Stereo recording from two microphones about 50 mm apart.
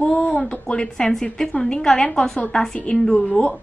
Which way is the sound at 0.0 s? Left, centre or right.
Left.